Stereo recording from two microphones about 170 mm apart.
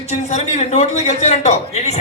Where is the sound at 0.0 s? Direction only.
40° left (ahead or behind).